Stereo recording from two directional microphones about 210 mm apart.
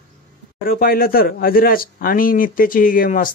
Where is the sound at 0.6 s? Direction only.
45° left (ahead or behind).